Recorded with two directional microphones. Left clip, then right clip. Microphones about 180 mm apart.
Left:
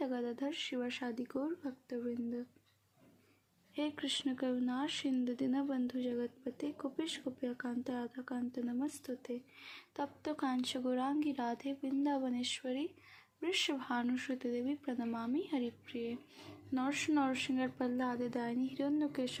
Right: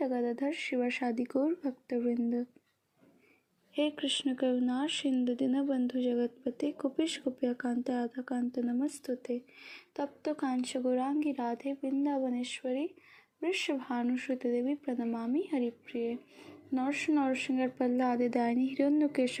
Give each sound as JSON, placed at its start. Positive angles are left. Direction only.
{"t": 0.0, "sound": "speech", "side_deg": -10}
{"t": 3.8, "sound": "speech", "side_deg": -5}